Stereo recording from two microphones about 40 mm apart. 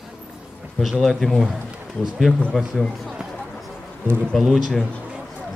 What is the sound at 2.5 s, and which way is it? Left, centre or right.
Speech, centre.